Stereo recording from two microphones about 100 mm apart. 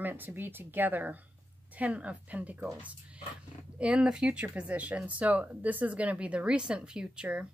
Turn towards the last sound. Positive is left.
turn(degrees=-10)  # may be behind; listen again after turning